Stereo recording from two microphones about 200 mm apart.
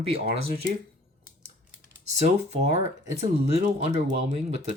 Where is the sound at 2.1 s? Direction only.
35° right (ahead or behind).